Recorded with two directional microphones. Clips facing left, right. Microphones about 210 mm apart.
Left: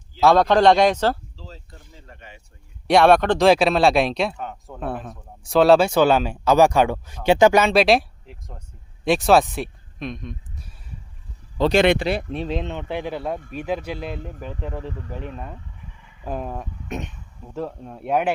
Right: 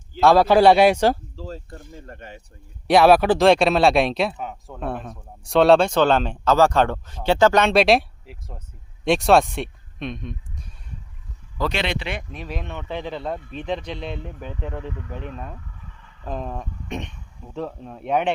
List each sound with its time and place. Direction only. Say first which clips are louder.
0.2 s a man's voice: right 1 dB; 5° right (ahead or behind)
1.4 s speech: right 8 dB; 50° right (ahead or behind)
2.8 s speech: right 1 dB; centre (ahead or behind); by 7.6 s 15° left (ahead or behind)
7.6 s speech: even; centre (ahead or behind)
11.7 s speech: left 9 dB; 45° left (ahead or behind); by 14.8 s 5° left (ahead or behind)
15.5 s speech: left 1 dB; 15° left (ahead or behind)